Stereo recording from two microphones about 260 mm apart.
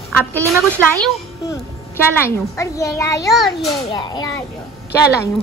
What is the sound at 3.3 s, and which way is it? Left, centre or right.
Speech, centre.